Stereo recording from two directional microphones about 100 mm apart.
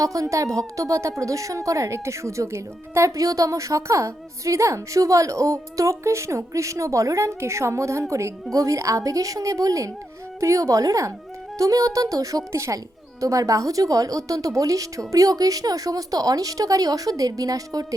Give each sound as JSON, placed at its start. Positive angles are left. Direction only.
{"t": 0.0, "sound": "a woman's voice", "side_deg": -35}